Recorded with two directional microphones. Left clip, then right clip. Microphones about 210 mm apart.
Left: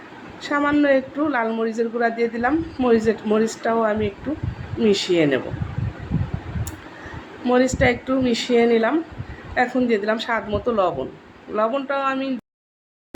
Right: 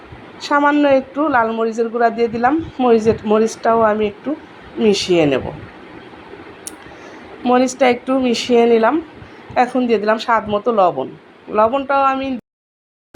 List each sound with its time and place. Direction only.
0.4 s a woman's voice: 10° right (ahead or behind)
7.4 s a woman's voice: 10° right (ahead or behind)